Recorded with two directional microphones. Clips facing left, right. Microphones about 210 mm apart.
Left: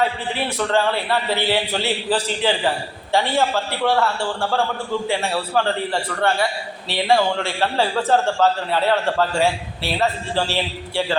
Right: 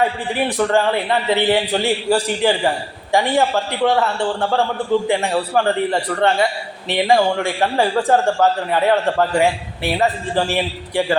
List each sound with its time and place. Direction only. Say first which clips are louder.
0.3 s a man's voice: right 4 dB; 15° right (ahead or behind)